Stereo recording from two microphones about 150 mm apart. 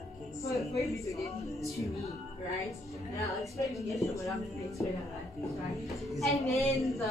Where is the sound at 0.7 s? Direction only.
20° left (ahead or behind).